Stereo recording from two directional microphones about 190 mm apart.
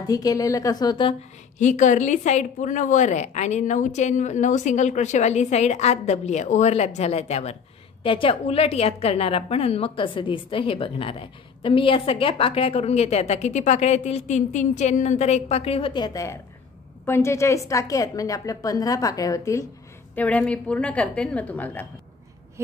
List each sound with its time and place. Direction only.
0.0 s a woman's voice: 20° left (ahead or behind)
1.6 s a woman's voice: 40° left (ahead or behind); by 21.8 s 10° left (ahead or behind)